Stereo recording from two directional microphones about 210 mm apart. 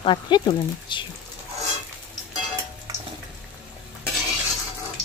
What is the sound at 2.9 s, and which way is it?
Frying, 15° right (ahead or behind).